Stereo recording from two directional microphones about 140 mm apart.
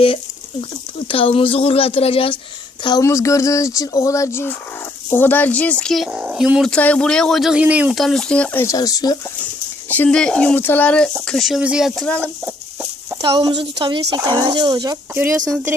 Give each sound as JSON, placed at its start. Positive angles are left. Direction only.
{"t": 0.9, "sound": "speech", "side_deg": 40}
{"t": 3.0, "sound": "speech", "side_deg": 20}
{"t": 6.7, "sound": "speech", "side_deg": 10}
{"t": 7.9, "sound": "speech", "side_deg": 0}
{"t": 8.6, "sound": "speech", "side_deg": 25}
{"t": 9.9, "sound": "speech", "side_deg": 10}
{"t": 13.3, "sound": "a woman's voice", "side_deg": -30}
{"t": 14.0, "sound": "speech", "side_deg": -25}
{"t": 15.1, "sound": "speech", "side_deg": -15}